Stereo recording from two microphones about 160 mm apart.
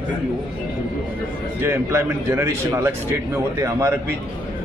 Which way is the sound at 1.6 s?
15° right (ahead or behind).